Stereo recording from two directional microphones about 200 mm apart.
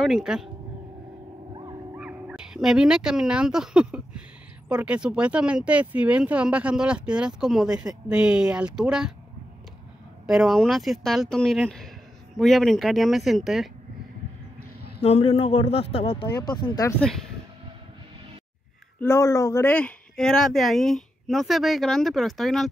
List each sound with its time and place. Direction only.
0.0 s speech: centre (ahead or behind)
1.5 s a sound: 25° right (ahead or behind)
2.0 s speech: 5° right (ahead or behind)
10.2 s speech: centre (ahead or behind)
15.0 s speech: 30° left (ahead or behind)
18.9 s speech: 15° left (ahead or behind)